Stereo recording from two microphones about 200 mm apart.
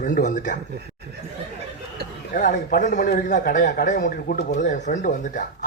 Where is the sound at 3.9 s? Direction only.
55° left (ahead or behind).